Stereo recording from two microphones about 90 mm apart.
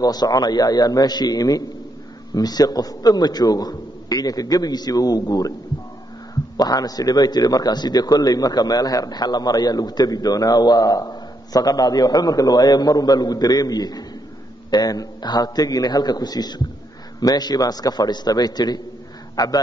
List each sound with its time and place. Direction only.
0.0 s a man's voice: 45° left (ahead or behind)
6.5 s a man's voice: 45° left (ahead or behind)